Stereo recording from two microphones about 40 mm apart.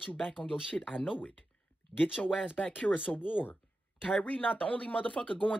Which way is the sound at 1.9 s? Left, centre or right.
Left.